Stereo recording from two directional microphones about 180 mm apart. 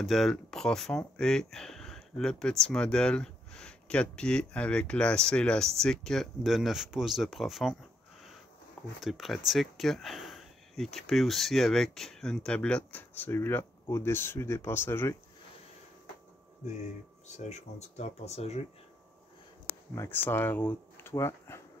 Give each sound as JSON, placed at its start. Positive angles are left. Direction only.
{"t": 0.0, "sound": "speech", "side_deg": 0}
{"t": 9.0, "sound": "speech", "side_deg": 0}
{"t": 17.3, "sound": "speech", "side_deg": 40}
{"t": 20.0, "sound": "speech", "side_deg": 10}